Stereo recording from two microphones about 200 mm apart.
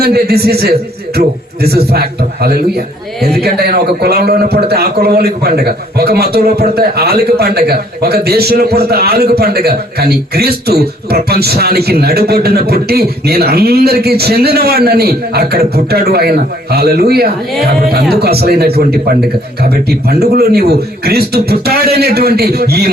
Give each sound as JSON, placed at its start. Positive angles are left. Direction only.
{"t": 0.0, "sound": "a man's voice", "side_deg": -50}